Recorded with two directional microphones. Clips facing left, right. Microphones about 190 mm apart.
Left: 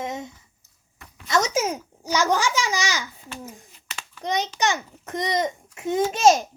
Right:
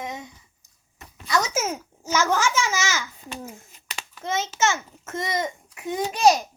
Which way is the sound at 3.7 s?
15° right (ahead or behind).